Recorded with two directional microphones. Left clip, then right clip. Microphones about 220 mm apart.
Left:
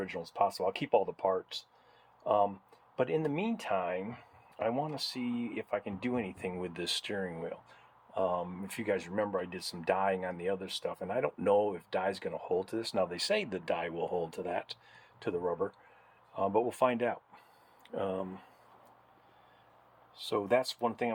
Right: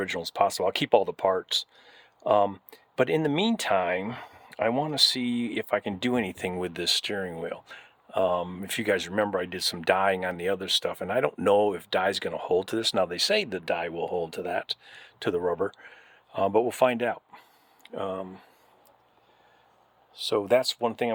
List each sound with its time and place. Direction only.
0.0 s speech: 50° right (ahead or behind); by 17.4 s 30° right (ahead or behind)
17.8 s speech: 20° right (ahead or behind)
20.1 s speech: 45° right (ahead or behind)